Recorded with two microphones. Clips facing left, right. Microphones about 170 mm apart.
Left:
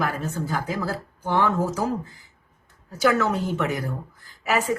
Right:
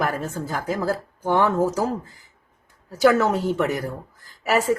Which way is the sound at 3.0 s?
40° right (ahead or behind).